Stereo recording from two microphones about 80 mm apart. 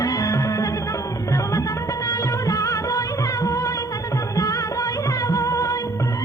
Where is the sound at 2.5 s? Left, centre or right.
Left.